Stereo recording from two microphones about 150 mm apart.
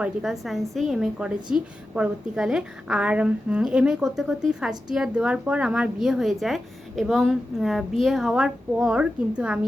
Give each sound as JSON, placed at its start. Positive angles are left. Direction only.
{"t": 0.0, "sound": "speech", "side_deg": -5}